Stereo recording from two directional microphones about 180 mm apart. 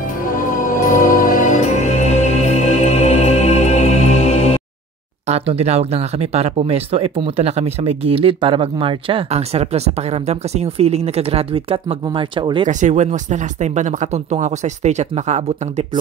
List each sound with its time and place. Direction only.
0.3 s music: 45° left (ahead or behind)
5.3 s speech: 35° right (ahead or behind)
12.6 s speech: 40° right (ahead or behind)